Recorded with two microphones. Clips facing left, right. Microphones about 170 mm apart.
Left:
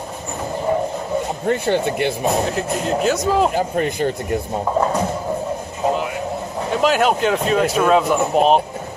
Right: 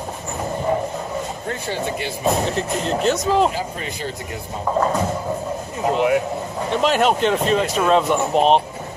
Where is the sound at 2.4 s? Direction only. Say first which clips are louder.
Left 1 dB; 5° left (ahead or behind).